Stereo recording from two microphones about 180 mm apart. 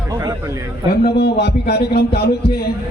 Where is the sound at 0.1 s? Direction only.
20° right (ahead or behind).